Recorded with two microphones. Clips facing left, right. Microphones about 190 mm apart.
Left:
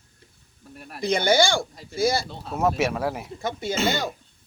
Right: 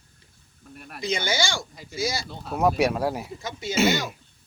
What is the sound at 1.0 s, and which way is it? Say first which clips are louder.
Speech: left 7 dB; 55° left (ahead or behind).